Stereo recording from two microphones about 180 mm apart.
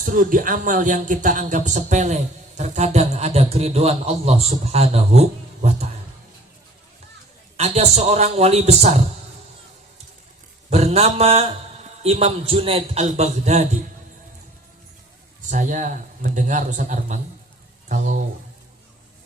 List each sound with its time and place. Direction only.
0.0 s speech: 50° right (ahead or behind)
7.5 s speech: 35° right (ahead or behind)
10.7 s speech: 35° right (ahead or behind)
15.4 s a man's voice: 45° right (ahead or behind)